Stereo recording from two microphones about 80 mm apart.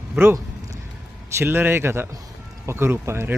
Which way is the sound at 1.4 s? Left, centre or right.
Right.